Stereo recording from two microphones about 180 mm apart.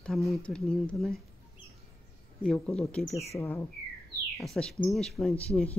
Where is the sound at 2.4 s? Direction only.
5° left (ahead or behind).